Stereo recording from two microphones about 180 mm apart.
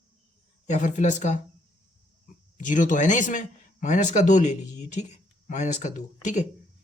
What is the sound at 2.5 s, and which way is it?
Speech, 45° left (ahead or behind).